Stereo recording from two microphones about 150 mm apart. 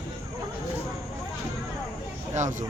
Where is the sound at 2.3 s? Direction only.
55° right (ahead or behind).